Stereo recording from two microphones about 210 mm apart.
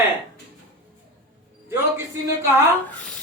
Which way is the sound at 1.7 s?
15° right (ahead or behind).